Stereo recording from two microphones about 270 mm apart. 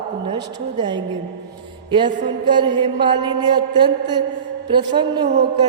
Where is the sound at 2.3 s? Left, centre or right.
Centre.